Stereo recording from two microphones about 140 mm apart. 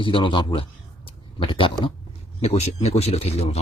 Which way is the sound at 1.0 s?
40° left (ahead or behind).